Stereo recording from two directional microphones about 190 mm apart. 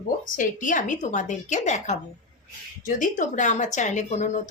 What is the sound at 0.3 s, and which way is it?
A woman's voice, 45° left (ahead or behind).